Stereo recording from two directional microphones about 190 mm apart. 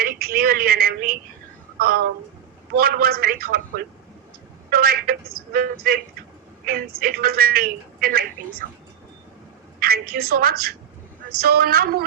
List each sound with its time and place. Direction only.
0.0 s a woman's voice: 50° right (ahead or behind)
9.8 s speech: 50° right (ahead or behind)